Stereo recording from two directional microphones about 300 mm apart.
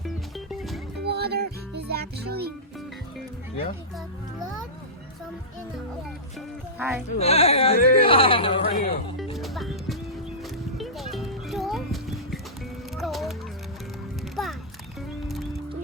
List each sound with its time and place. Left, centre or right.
0.0 s music: centre
1.0 s music: right
6.7 s speech: centre
7.2 s speech: centre
9.3 s music: centre
14.4 s music: centre